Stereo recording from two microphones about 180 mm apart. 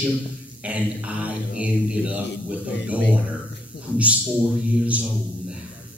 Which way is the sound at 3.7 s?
70° left (ahead or behind).